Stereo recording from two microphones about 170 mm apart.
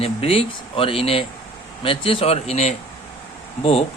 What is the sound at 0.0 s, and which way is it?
Speech, 35° left (ahead or behind).